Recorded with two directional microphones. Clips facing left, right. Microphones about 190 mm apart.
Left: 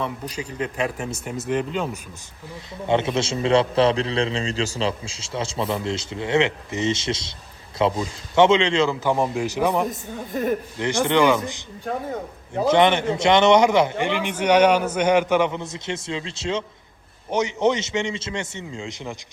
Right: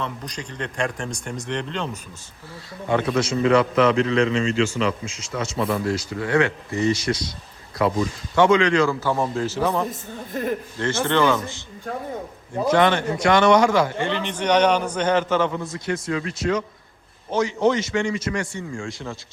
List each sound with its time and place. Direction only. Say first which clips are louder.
0.0 s a man's voice: left 2 dB; 5° left (ahead or behind)
2.8 s a man's voice: even; 25° left (ahead or behind)
9.9 s a man's voice: left 2 dB; centre (ahead or behind)
10.8 s a man's voice: left 1 dB; 15° left (ahead or behind)